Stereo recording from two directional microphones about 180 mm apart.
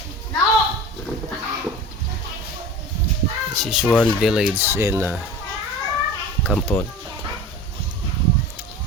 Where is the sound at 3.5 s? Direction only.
Centre (ahead or behind).